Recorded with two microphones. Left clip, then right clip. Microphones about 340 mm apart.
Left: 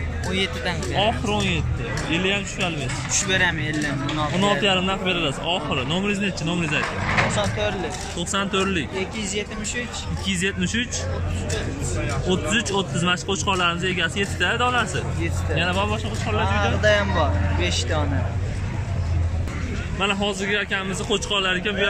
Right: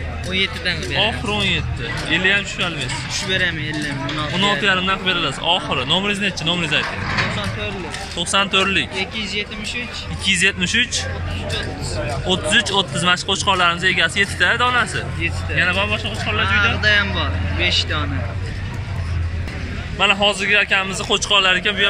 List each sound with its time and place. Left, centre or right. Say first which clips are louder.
0.3 s speech: right 5 dB; left
1.0 s speech: right 2 dB; centre
3.1 s speech: even; left
4.6 s speech: right 3 dB; centre
6.8 s speech: right 1 dB; left
8.2 s speech: right 7 dB; centre
9.2 s speech: right 4 dB; left
10.2 s speech: right 9 dB; centre
12.3 s speech: right 6 dB; centre
16.8 s speech: right 2 dB; left
20.0 s speech: right 8 dB; centre